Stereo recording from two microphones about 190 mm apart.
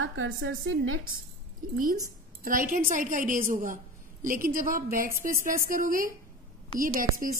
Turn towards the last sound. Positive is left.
turn(degrees=-50)  # may be behind; listen again after turning